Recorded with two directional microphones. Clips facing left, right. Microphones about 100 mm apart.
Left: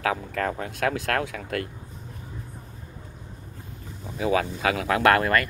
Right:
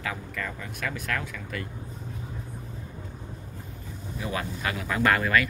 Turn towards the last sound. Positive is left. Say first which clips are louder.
# left 3 dB
turn(degrees=55)  # may be behind; listen again after turning